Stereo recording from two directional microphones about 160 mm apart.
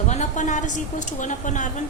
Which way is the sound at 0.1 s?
50° left (ahead or behind).